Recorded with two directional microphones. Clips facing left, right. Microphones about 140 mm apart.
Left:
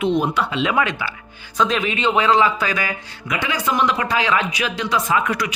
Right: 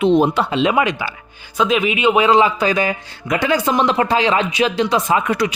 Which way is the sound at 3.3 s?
35° right (ahead or behind).